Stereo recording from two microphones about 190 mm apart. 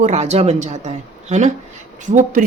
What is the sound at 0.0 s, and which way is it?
A woman's voice, 35° right (ahead or behind).